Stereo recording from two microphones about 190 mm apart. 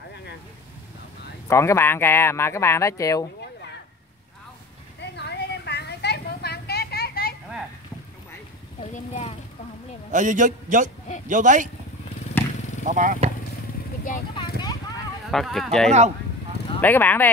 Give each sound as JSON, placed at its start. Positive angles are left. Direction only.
{"t": 1.5, "sound": "speech", "side_deg": 15}
{"t": 5.1, "sound": "a sound", "side_deg": 60}
{"t": 8.9, "sound": "a sound", "side_deg": 40}
{"t": 10.1, "sound": "a man's voice", "side_deg": -40}
{"t": 12.8, "sound": "a man's voice", "side_deg": -45}
{"t": 14.3, "sound": "clip-clop", "side_deg": 25}
{"t": 15.3, "sound": "speech", "side_deg": 0}